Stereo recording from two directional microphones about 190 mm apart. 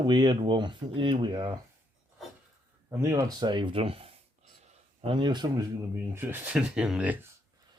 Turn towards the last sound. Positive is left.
turn(degrees=-10)  # may be behind; listen again after turning